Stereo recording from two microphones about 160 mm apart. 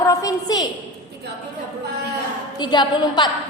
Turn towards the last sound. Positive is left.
turn(degrees=30)  # may be behind; listen again after turning